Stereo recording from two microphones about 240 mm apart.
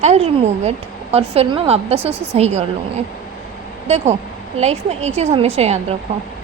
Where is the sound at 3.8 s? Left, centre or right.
Right.